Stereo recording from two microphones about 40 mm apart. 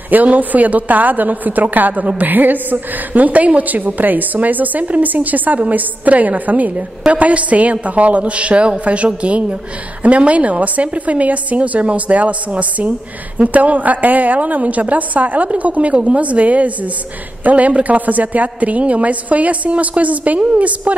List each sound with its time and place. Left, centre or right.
0.1 s a woman's voice: right